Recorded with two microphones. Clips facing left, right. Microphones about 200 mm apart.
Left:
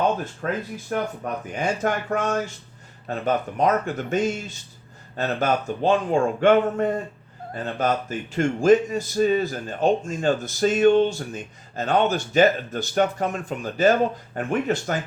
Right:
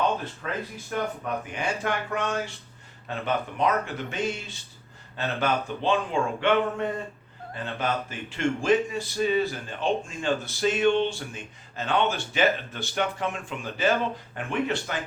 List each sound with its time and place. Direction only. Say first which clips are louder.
0.4 s speech: left 6 dB; 45° left (ahead or behind)